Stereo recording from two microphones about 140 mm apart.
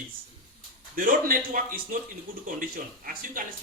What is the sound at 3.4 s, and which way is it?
Speech, 80° right.